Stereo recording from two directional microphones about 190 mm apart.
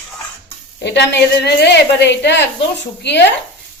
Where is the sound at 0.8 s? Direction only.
65° left (ahead or behind).